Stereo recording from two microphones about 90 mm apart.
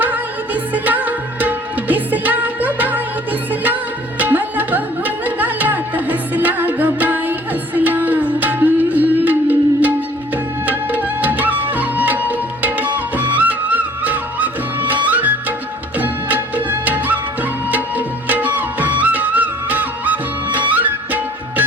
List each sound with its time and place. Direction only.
0.0 s music: 20° right (ahead or behind)